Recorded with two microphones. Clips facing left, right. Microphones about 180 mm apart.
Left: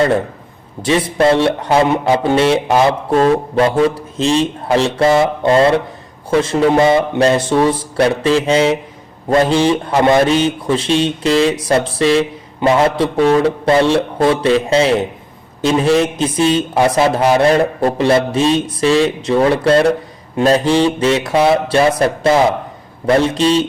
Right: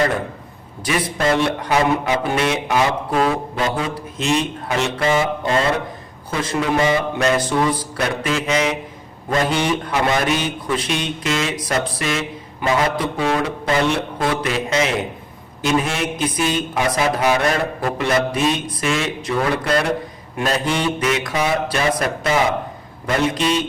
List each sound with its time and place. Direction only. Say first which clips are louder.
0.9 s a man's voice: left 7 dB; 25° left (ahead or behind)